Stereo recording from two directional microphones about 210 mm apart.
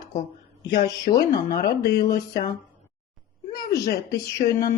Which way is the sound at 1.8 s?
50° left (ahead or behind).